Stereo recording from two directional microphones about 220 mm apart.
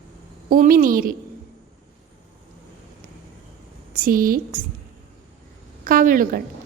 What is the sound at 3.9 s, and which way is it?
Speech, 40° right (ahead or behind).